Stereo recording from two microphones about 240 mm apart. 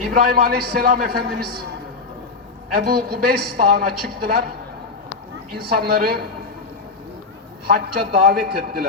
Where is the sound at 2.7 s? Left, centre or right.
Right.